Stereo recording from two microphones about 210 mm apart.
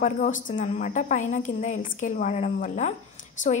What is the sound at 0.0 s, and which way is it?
A woman's voice, 35° left (ahead or behind).